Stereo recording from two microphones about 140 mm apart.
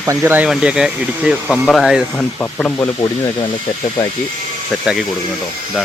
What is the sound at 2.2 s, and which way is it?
Speech, 5° left (ahead or behind).